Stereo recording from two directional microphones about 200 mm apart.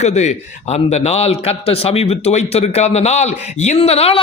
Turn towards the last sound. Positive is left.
turn(degrees=30)  # may be behind; listen again after turning